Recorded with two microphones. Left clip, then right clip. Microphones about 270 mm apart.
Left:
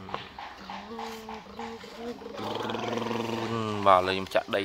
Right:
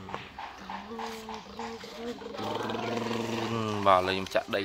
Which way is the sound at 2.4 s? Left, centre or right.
Centre.